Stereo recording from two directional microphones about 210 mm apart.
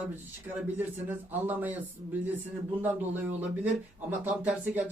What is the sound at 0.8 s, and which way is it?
Speech, 10° right (ahead or behind).